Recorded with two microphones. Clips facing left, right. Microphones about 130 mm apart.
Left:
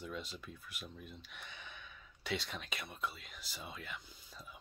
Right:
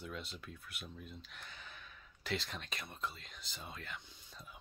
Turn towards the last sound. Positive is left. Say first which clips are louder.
# left 1 dB
turn(degrees=0)  # may be behind; listen again after turning